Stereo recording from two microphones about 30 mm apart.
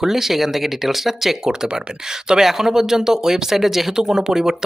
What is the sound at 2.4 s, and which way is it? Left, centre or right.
Speech, centre.